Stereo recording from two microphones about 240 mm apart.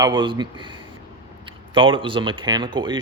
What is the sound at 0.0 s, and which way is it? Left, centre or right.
Speech, centre.